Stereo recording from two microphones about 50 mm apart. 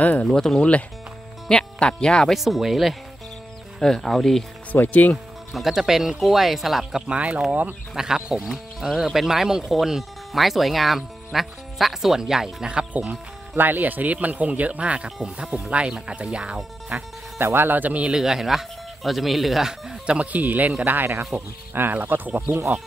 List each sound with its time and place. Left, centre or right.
0.0 s speech: left
0.3 s speech: centre
2.3 s speech: centre
4.8 s speech: left
5.1 s speech: centre
7.1 s speech: right
7.9 s speech: centre
12.9 s speech: right
15.0 s speech: centre; by 17.1 s right
17.4 s speech: right
18.1 s speech: centre
20.1 s speech: right
20.4 s speech: right